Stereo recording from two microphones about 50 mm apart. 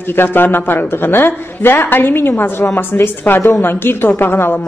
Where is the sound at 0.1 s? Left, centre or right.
Left.